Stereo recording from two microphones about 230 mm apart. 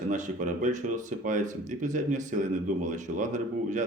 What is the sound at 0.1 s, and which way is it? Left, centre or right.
Speech, right.